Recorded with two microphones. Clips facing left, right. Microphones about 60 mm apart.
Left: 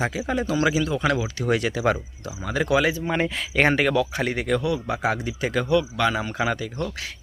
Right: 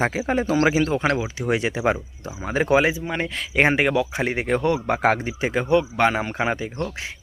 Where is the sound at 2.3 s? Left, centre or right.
Right.